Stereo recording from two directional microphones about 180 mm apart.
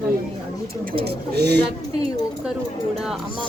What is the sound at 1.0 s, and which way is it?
Speech, 65° right (ahead or behind).